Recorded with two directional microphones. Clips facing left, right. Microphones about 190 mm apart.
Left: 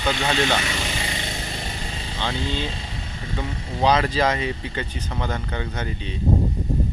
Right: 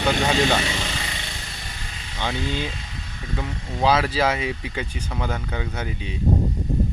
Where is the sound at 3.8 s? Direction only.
5° right (ahead or behind).